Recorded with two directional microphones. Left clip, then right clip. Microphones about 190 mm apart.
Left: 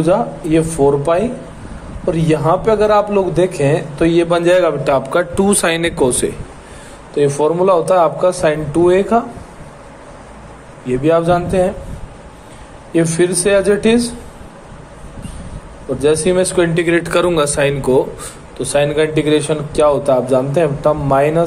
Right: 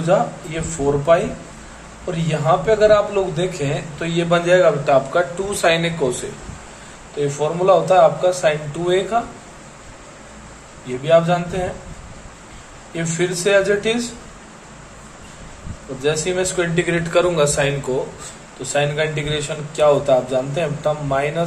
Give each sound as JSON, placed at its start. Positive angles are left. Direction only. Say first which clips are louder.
{"t": 0.0, "sound": "a man's voice", "louder": "left 3 dB", "side_deg": 40}
{"t": 7.2, "sound": "a man's voice", "louder": "left 7 dB", "side_deg": 45}
{"t": 10.9, "sound": "a man's voice", "louder": "left 2 dB", "side_deg": 40}
{"t": 12.9, "sound": "a man's voice", "louder": "left 8 dB", "side_deg": 40}
{"t": 16.0, "sound": "a man's voice", "louder": "left 6 dB", "side_deg": 45}